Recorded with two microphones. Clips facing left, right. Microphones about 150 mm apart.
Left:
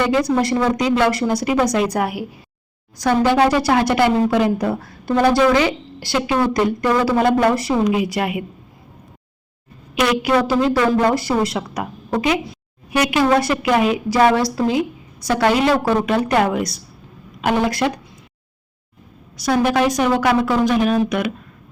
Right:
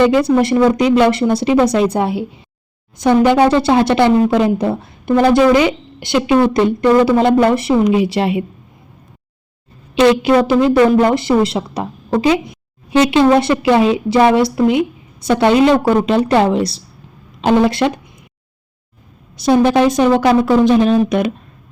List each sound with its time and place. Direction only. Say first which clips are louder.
0.0 s a woman's voice: right 6 dB; 25° right (ahead or behind)
9.9 s a woman's voice: right 6 dB; 25° right (ahead or behind)
19.4 s a woman's voice: right 5 dB; 25° right (ahead or behind)